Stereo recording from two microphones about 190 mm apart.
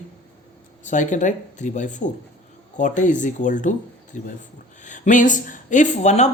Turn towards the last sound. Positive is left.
turn(degrees=35)  # may be behind; listen again after turning